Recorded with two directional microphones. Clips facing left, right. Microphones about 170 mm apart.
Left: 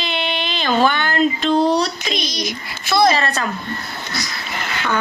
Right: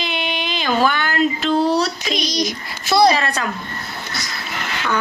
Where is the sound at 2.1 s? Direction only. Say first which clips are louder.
Right 3 dB; 40° right (ahead or behind).